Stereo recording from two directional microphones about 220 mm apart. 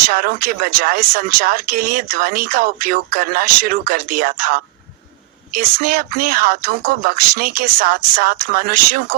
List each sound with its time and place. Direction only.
0.0 s speech: 40° right (ahead or behind)